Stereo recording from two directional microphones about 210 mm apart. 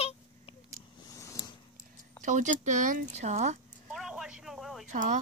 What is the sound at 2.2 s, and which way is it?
Speech, 35° right (ahead or behind).